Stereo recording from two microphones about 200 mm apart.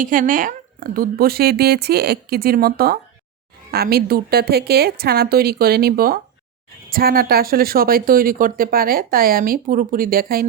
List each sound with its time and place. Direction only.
0.0 s speech: 40° right (ahead or behind)